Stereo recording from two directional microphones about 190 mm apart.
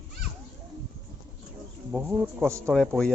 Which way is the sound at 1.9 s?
5° right (ahead or behind).